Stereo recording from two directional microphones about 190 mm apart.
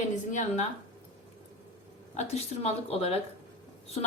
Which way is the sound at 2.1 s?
35° left (ahead or behind).